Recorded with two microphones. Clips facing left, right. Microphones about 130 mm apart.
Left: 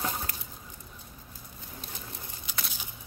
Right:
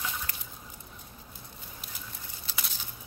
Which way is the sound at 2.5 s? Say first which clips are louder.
Left 1 dB; 15° left (ahead or behind).